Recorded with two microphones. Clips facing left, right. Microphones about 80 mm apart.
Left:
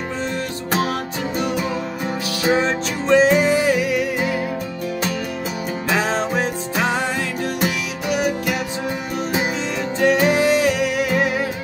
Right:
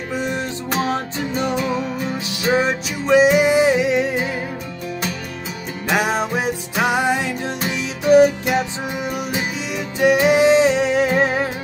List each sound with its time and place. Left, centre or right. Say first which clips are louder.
2.5 s music: right 2 dB; centre
5.9 s music: right 2 dB; centre
8.1 s music: right 9 dB; right
9.9 s music: right 2 dB; centre